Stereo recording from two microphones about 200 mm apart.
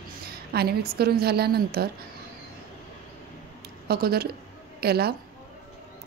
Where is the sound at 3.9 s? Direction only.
50° right (ahead or behind).